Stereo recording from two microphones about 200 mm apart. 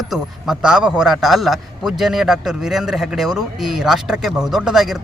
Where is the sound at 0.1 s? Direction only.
5° right (ahead or behind).